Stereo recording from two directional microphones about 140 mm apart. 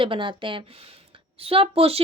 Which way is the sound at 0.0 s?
40° right (ahead or behind).